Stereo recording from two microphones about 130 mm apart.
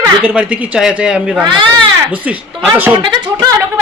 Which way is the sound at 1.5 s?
35° right (ahead or behind).